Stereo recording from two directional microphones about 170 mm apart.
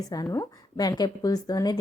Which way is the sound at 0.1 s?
20° left (ahead or behind).